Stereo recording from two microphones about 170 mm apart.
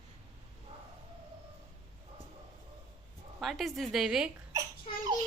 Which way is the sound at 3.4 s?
Centre (ahead or behind).